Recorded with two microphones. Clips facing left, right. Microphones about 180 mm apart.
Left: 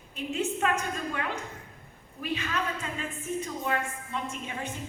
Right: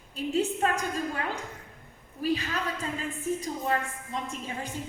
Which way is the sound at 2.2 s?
35° right (ahead or behind).